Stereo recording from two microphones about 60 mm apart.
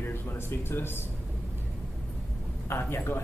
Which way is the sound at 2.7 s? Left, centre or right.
Left.